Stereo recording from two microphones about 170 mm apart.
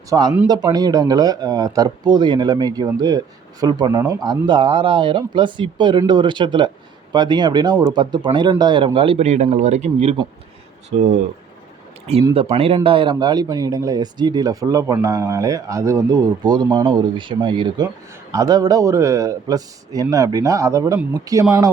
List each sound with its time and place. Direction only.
0.1 s speech: 20° right (ahead or behind); by 10.2 s 40° right (ahead or behind)
12.3 s speech: 35° right (ahead or behind)